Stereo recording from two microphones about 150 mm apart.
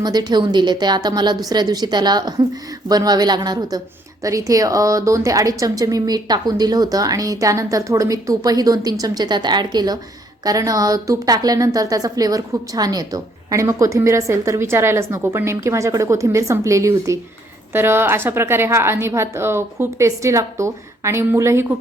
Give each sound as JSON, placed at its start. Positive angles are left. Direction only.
{"t": 0.0, "sound": "a woman's voice", "side_deg": -25}